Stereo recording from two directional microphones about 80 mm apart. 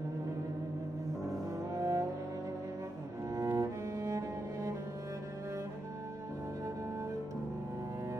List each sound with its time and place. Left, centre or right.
1.8 s cello: right
3.3 s cello: right